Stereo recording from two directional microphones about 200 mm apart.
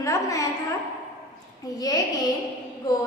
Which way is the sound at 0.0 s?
15° left (ahead or behind).